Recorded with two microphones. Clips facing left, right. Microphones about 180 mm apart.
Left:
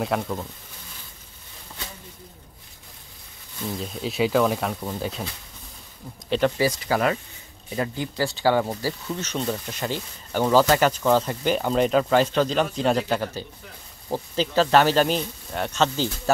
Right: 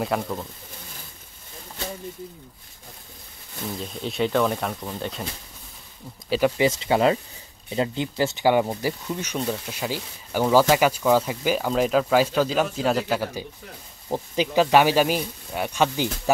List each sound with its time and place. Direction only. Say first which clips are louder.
0.0 s speech: even; centre (ahead or behind)
3.8 s speech: left 1 dB; 5° left (ahead or behind)
6.6 s speech: right 2 dB; 25° right (ahead or behind)